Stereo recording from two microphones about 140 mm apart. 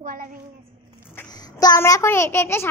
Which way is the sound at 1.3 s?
30° left (ahead or behind).